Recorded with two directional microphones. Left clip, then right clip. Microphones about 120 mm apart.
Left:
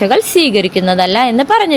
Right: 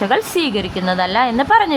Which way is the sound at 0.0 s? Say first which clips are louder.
Left 6 dB; 30° left (ahead or behind).